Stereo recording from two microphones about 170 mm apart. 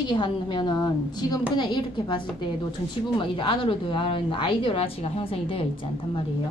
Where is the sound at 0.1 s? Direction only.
30° left (ahead or behind).